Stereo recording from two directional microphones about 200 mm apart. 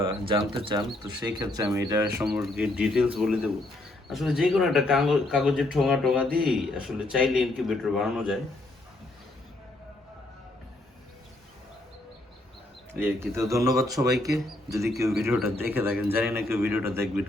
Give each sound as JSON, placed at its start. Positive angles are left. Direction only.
{"t": 0.3, "sound": "speech", "side_deg": -25}
{"t": 2.2, "sound": "speech", "side_deg": 0}
{"t": 12.9, "sound": "speech", "side_deg": -10}